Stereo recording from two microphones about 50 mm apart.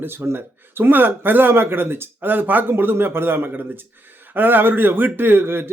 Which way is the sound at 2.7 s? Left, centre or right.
Right.